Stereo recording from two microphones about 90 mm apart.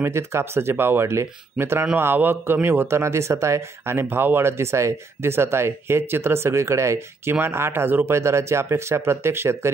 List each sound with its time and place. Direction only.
0.0 s speech: 30° right (ahead or behind)